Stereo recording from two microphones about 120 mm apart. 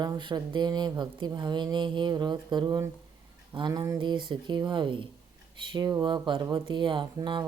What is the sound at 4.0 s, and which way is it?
Speech, 40° right (ahead or behind).